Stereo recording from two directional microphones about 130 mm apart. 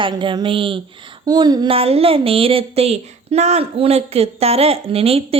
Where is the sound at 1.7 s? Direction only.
50° right (ahead or behind).